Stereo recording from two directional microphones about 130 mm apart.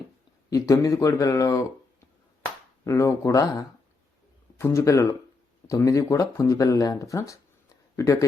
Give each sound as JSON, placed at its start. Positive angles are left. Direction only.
{"t": 0.5, "sound": "speech", "side_deg": 25}
{"t": 2.8, "sound": "speech", "side_deg": 20}